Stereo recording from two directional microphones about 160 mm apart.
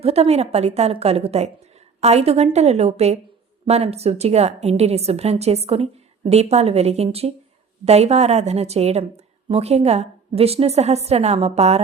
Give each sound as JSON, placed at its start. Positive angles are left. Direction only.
{"t": 0.0, "sound": "a woman's voice", "side_deg": -40}